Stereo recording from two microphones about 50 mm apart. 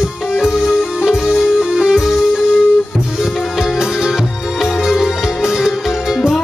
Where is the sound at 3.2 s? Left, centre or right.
Centre.